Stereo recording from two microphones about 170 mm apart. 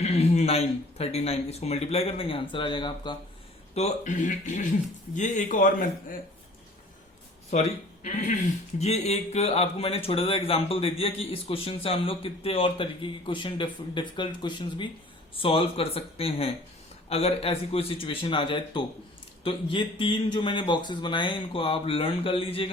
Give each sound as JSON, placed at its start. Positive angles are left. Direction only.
{"t": 0.0, "sound": "speech", "side_deg": 40}
{"t": 3.8, "sound": "speech", "side_deg": 45}
{"t": 7.5, "sound": "speech", "side_deg": 45}